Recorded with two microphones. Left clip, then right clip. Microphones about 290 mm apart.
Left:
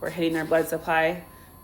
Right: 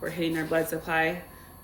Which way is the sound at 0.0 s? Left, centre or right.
Centre.